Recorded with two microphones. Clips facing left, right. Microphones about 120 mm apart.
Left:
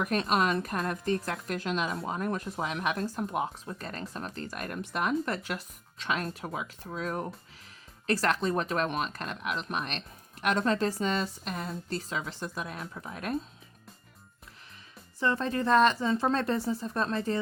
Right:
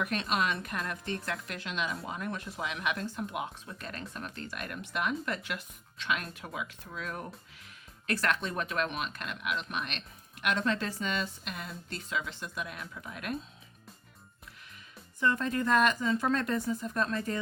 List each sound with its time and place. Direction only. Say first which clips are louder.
0.0 s speech: left 4 dB; 40° left (ahead or behind)
15.2 s speech: left 1 dB; 30° left (ahead or behind)